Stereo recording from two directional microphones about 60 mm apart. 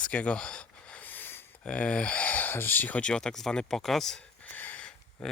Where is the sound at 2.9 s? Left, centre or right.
Centre.